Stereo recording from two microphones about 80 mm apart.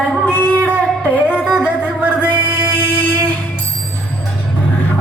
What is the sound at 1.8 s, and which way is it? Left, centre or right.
Music, right.